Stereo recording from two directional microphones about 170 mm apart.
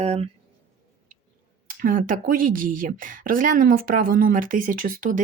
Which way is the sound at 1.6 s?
55° right (ahead or behind).